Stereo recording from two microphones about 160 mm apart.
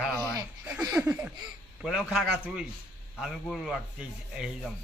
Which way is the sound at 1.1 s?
10° right (ahead or behind).